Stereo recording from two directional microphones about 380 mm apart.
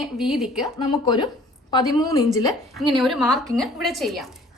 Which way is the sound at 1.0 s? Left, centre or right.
Centre.